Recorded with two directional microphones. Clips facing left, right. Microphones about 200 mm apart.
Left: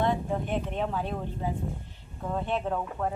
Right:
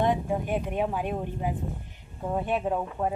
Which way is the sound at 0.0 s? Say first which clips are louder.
Right 2 dB; 15° right (ahead or behind).